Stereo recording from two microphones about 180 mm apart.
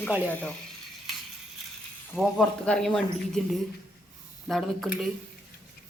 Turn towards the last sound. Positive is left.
turn(degrees=0)  # may be behind; listen again after turning